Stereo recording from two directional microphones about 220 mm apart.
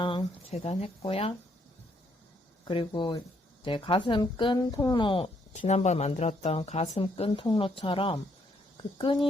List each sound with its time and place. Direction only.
0.0 s speech: 20° left (ahead or behind)
2.6 s speech: 20° left (ahead or behind)